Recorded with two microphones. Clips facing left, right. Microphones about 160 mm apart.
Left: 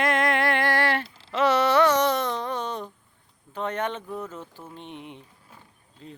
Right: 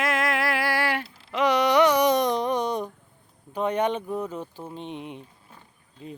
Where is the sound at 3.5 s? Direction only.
15° right (ahead or behind).